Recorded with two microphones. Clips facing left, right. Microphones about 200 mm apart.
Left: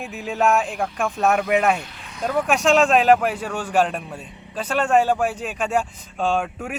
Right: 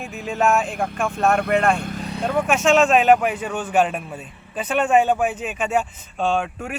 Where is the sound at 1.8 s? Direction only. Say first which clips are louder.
Right 11 dB; 45° right (ahead or behind).